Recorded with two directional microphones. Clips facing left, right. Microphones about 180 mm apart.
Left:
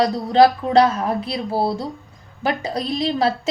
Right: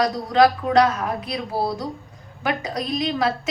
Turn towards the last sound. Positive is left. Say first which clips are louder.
# left 2 dB
turn(degrees=30)  # may be behind; listen again after turning